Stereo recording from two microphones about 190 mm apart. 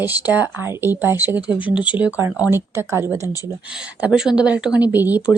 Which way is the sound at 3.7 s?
5° right (ahead or behind).